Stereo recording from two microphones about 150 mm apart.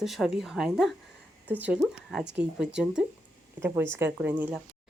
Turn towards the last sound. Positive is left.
turn(degrees=-10)  # may be behind; listen again after turning